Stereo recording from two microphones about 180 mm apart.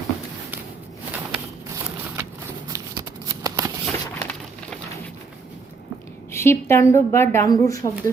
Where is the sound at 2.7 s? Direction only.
20° right (ahead or behind).